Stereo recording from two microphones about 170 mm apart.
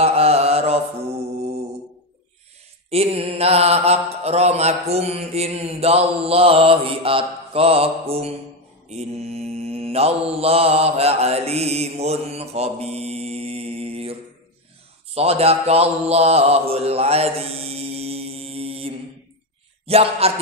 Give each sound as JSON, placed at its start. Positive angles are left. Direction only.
{"t": 0.0, "sound": "mantra", "side_deg": -35}
{"t": 2.9, "sound": "mantra", "side_deg": -35}
{"t": 15.1, "sound": "mantra", "side_deg": -35}